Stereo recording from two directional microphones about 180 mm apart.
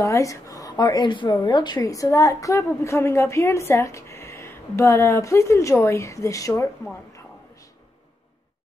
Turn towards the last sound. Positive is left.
turn(degrees=15)  # may be behind; listen again after turning